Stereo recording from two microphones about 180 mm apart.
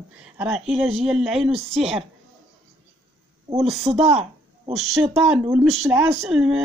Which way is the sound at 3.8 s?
35° right (ahead or behind).